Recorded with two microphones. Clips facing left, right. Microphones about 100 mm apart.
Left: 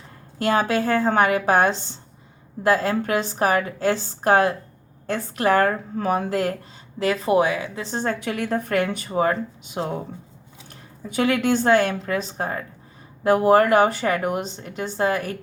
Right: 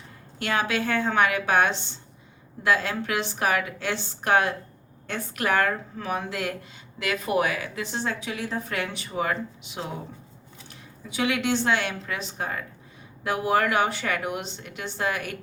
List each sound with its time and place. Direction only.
0.3 s speech: 40° left (ahead or behind)
8.2 s a woman's voice: 55° left (ahead or behind); by 15.4 s 35° left (ahead or behind)